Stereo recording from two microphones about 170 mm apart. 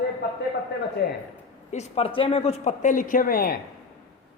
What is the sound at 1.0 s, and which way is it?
Speech, 70° left (ahead or behind).